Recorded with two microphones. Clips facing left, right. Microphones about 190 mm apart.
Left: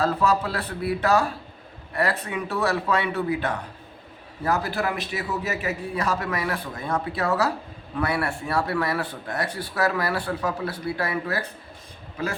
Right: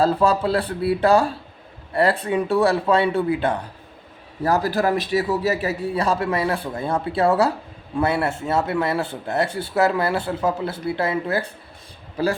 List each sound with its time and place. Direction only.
0.0 s a man's voice: 30° right (ahead or behind)